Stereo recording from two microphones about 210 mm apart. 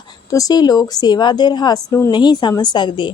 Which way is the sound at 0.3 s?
15° left (ahead or behind).